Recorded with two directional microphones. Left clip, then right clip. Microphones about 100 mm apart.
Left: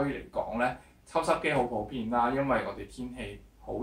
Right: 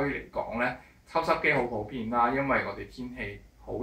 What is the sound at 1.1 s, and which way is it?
Speech, 30° left (ahead or behind).